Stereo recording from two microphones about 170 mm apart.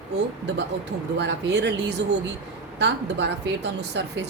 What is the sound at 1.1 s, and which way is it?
Speech, 90° right.